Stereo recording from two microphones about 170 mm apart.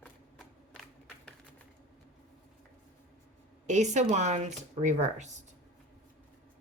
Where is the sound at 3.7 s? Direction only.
45° right (ahead or behind).